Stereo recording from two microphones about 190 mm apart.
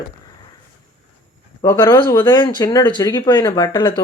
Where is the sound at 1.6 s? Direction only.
20° left (ahead or behind).